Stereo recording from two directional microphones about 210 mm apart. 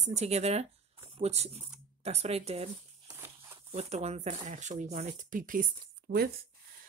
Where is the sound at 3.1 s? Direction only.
10° right (ahead or behind).